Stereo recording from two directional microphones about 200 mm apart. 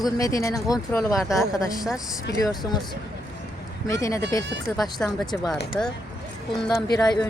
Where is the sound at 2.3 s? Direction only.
20° left (ahead or behind).